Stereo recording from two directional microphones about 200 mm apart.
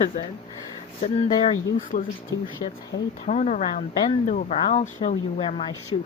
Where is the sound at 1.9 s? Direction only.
40° left (ahead or behind).